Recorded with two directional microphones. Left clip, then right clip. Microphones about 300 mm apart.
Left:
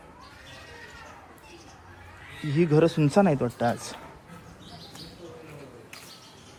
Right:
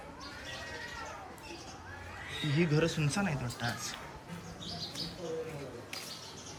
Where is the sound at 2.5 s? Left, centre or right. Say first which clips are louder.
Left 10 dB; centre.